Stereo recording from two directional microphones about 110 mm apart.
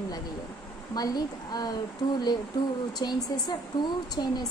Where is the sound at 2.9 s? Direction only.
40° left (ahead or behind).